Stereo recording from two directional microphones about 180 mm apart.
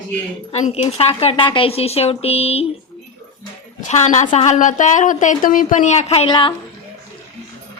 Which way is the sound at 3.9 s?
40° left (ahead or behind).